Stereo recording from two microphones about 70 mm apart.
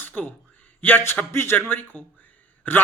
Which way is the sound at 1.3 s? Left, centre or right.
Left.